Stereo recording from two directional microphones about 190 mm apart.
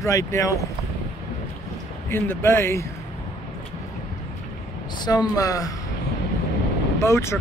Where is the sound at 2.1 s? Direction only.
10° left (ahead or behind).